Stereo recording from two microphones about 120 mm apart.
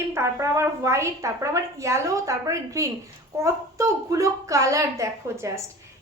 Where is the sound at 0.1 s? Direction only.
25° right (ahead or behind).